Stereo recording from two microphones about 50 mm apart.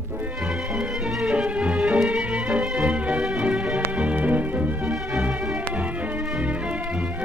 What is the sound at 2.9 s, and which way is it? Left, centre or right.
Music, centre.